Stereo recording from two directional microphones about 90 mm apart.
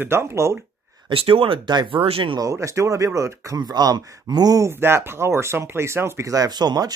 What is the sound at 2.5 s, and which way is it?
Speech, 35° right (ahead or behind).